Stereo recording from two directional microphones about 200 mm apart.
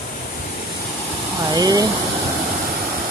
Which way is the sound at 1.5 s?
20° right (ahead or behind).